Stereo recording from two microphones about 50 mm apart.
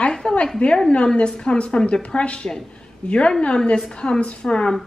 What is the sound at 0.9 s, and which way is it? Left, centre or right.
A woman's voice, left.